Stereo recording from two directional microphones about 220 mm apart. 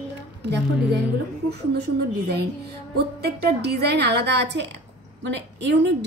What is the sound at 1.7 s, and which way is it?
A woman's voice, 45° right (ahead or behind).